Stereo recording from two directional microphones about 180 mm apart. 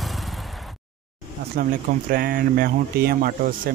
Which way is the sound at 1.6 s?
50° right (ahead or behind).